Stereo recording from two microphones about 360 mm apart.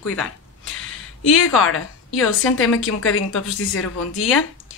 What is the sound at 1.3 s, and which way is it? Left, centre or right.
A woman's voice, left.